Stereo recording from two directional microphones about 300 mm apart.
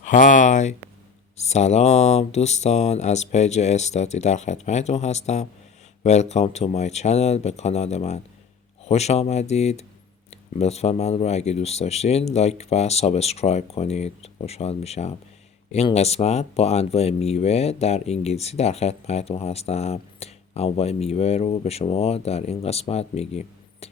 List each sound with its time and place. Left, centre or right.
0.0 s speech: left